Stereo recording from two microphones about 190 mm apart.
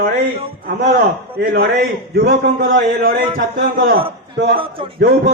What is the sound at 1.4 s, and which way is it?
A man's voice, 55° right (ahead or behind).